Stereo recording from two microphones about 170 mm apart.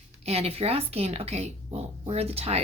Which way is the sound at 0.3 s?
35° right (ahead or behind).